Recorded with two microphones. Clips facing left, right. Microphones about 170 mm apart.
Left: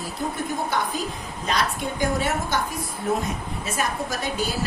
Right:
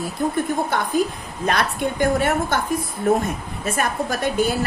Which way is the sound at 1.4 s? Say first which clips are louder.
Right 4 dB; 55° right (ahead or behind).